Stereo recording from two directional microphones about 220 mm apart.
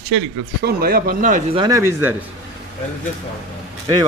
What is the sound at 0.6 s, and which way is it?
Speech, 45° right (ahead or behind).